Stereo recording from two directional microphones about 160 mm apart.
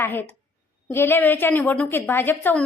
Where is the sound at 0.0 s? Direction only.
15° left (ahead or behind).